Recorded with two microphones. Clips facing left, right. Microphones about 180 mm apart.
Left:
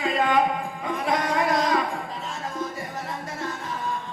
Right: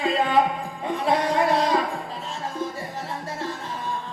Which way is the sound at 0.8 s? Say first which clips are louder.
Right 3 dB; 30° right (ahead or behind).